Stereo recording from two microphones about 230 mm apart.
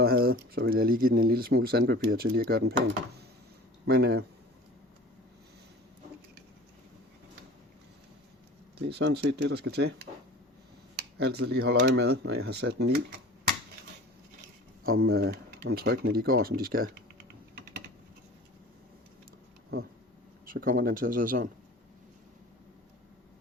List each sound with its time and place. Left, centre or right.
0.0 s speech: right
8.8 s speech: right
11.2 s speech: right
14.8 s speech: right
20.5 s speech: right